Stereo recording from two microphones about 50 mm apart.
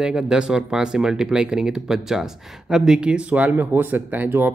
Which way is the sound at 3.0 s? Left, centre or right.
Right.